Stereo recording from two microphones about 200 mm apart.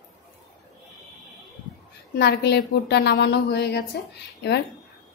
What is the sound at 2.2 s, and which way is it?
A woman's voice, 55° left (ahead or behind).